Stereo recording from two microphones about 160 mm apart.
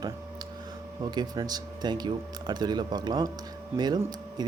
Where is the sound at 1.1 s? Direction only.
25° right (ahead or behind).